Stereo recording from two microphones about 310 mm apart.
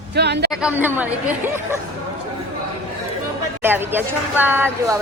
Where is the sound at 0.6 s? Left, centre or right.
Centre.